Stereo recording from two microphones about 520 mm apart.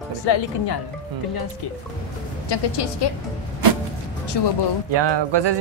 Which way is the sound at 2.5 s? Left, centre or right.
Left.